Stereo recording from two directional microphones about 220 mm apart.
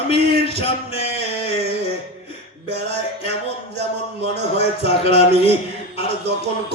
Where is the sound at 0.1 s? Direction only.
50° right (ahead or behind).